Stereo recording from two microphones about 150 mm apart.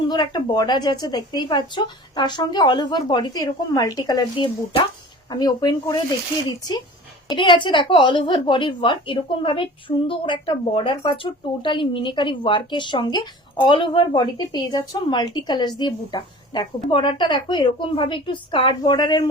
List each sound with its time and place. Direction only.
0.1 s speech: 30° left (ahead or behind)
7.3 s a woman's voice: 30° left (ahead or behind)